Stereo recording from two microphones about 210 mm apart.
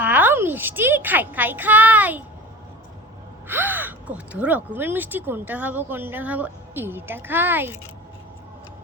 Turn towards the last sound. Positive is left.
turn(degrees=-10)  # may be behind; listen again after turning